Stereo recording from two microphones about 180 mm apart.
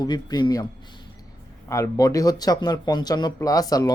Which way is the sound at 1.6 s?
15° left (ahead or behind).